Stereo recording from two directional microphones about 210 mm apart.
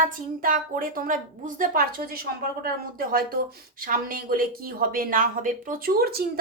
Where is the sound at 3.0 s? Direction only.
45° right (ahead or behind).